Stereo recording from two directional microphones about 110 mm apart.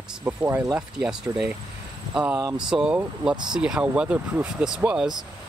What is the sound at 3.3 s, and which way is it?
Speech, 40° right (ahead or behind).